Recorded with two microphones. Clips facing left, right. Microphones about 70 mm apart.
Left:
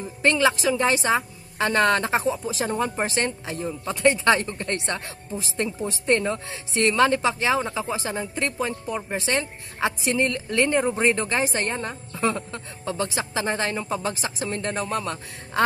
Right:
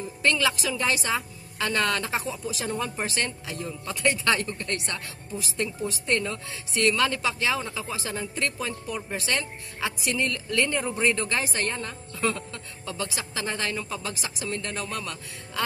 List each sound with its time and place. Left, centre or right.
0.2 s a woman's voice: left